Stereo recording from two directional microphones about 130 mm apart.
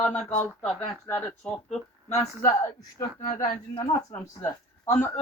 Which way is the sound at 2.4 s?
20° left (ahead or behind).